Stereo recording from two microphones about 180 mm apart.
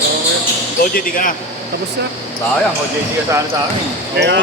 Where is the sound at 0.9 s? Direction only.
50° left (ahead or behind).